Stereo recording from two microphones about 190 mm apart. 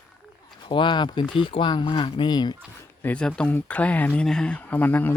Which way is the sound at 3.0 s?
5° left (ahead or behind).